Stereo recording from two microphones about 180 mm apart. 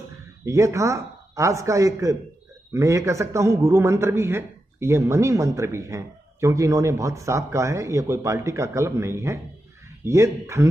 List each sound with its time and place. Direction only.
0.1 s a man's voice: 15° right (ahead or behind)